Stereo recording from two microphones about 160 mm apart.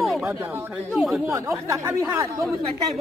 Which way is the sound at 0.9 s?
Centre (ahead or behind).